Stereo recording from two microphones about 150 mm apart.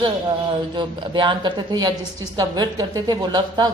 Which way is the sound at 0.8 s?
30° right (ahead or behind).